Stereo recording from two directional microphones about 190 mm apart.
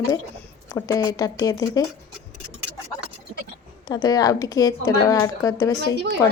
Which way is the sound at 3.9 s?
20° left (ahead or behind).